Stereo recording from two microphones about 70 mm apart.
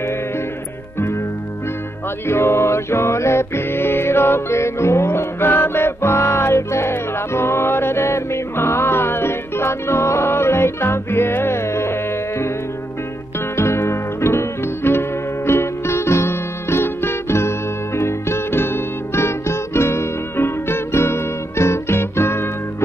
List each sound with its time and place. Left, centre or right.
2.2 s music: left
13.6 s music: left